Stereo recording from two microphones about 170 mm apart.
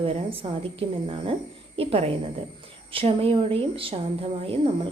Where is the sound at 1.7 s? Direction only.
35° right (ahead or behind).